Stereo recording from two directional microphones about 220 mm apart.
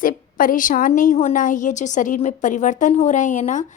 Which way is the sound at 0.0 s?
40° left (ahead or behind).